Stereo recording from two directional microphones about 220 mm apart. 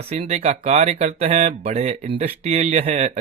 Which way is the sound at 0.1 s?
30° right (ahead or behind).